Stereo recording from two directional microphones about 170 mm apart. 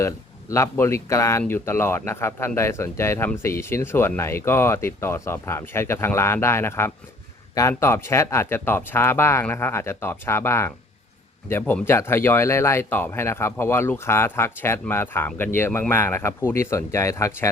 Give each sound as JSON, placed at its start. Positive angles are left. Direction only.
{"t": 0.0, "sound": "speech", "side_deg": 15}